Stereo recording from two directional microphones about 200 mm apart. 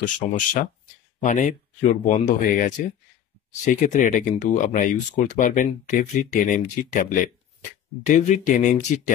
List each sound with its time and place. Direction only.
0.0 s speech: 40° left (ahead or behind)